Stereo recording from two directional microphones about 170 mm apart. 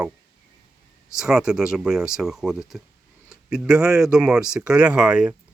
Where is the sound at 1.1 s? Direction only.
5° right (ahead or behind).